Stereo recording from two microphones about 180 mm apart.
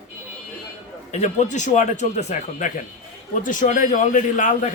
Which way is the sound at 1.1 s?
40° left (ahead or behind).